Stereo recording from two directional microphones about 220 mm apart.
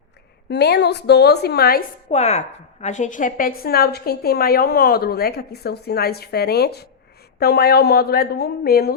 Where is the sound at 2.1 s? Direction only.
30° left (ahead or behind).